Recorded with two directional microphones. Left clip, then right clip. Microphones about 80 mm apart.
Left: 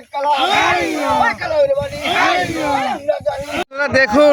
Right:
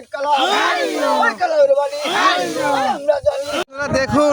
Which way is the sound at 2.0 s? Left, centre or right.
Right.